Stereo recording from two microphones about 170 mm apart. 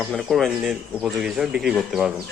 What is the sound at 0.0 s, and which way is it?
Speech, centre (ahead or behind).